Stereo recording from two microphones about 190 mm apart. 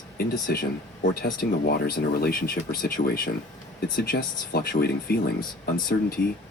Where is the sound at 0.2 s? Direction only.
50° left (ahead or behind).